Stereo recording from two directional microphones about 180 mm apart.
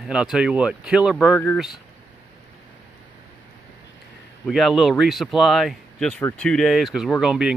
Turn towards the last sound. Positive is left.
turn(degrees=-5)  # may be behind; listen again after turning